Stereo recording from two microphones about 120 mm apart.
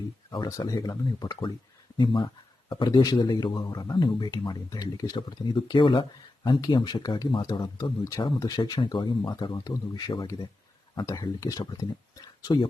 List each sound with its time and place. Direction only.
0.3 s speech: 35° left (ahead or behind)